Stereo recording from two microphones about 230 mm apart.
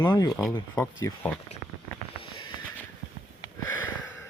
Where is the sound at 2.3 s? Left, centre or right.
Left.